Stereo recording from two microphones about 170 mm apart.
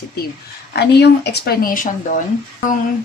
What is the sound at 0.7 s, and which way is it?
Speech, 80° left.